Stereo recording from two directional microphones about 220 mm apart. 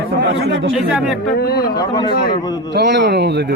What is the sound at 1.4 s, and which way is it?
Speech, 45° left (ahead or behind).